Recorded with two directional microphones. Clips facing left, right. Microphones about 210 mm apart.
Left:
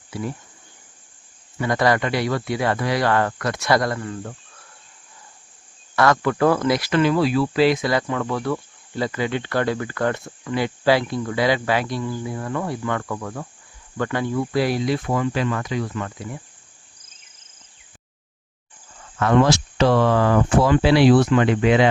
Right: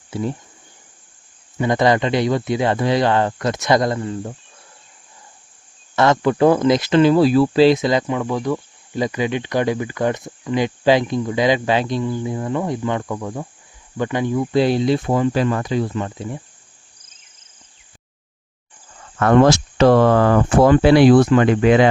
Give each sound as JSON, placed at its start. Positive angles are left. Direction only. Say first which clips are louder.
{"t": 0.1, "sound": "speech", "louder": "right 5 dB", "side_deg": -25}
{"t": 1.5, "sound": "speech", "louder": "right 3 dB", "side_deg": -20}
{"t": 6.0, "sound": "speech", "louder": "right 3 dB", "side_deg": -25}
{"t": 19.2, "sound": "speech", "louder": "right 4 dB", "side_deg": -50}